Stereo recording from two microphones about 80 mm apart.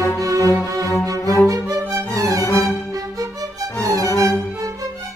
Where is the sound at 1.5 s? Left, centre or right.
Right.